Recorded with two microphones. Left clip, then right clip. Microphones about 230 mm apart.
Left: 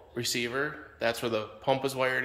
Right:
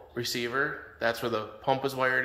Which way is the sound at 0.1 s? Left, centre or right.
Centre.